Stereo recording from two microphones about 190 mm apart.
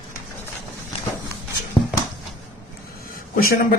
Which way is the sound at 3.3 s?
50° left (ahead or behind).